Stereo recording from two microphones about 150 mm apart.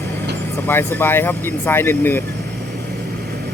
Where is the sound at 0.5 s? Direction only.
15° left (ahead or behind).